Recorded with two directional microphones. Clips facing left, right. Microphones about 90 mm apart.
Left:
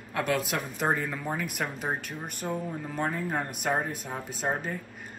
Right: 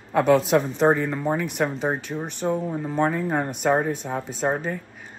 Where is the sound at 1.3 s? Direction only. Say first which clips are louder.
Right 7 dB; 5° left (ahead or behind).